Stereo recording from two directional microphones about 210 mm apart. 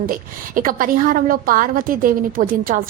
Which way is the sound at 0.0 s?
40° right (ahead or behind).